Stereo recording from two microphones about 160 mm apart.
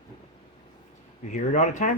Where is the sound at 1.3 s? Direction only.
50° left (ahead or behind).